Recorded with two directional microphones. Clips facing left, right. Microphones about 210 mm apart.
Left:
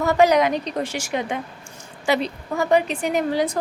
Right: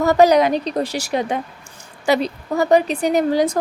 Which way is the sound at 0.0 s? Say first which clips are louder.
Right 4 dB; 40° right (ahead or behind).